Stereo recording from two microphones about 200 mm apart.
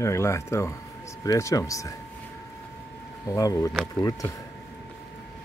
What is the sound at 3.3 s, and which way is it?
Speech, 15° left (ahead or behind).